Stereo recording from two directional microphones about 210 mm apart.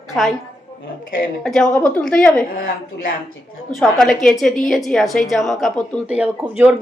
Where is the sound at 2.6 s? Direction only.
45° left (ahead or behind).